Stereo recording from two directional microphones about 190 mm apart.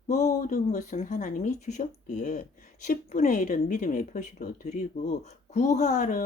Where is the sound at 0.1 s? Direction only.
40° left (ahead or behind).